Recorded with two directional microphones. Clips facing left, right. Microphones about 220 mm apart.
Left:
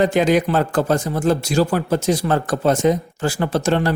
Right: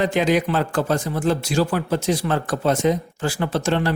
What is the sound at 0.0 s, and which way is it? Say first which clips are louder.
Speech: left 3 dB; 45° left (ahead or behind).